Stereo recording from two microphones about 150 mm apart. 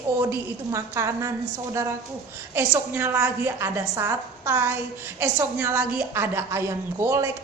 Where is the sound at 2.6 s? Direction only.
15° right (ahead or behind).